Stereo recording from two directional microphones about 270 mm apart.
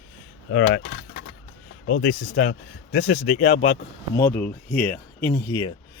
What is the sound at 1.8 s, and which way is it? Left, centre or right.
Speech, left.